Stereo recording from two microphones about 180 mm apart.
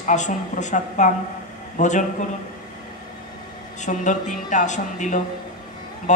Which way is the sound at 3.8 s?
45° left (ahead or behind).